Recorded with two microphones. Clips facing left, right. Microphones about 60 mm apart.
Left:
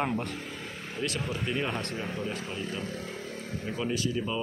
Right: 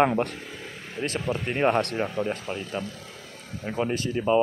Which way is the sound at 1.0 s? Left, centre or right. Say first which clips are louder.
Right 4 dB; right.